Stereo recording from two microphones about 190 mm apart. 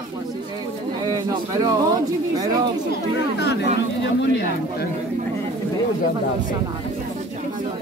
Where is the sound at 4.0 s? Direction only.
70° left (ahead or behind).